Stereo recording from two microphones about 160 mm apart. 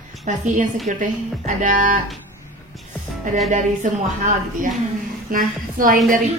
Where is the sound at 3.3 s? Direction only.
50° right (ahead or behind).